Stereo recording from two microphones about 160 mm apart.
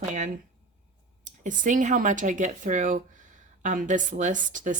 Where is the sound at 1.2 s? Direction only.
55° right (ahead or behind).